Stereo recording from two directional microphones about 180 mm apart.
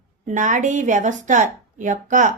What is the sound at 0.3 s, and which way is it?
A woman's voice, 45° right (ahead or behind).